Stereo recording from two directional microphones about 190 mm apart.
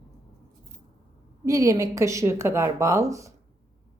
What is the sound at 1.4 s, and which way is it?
A woman's voice, 20° right (ahead or behind).